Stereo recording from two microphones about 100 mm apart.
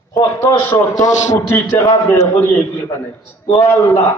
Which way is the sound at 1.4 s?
25° left (ahead or behind).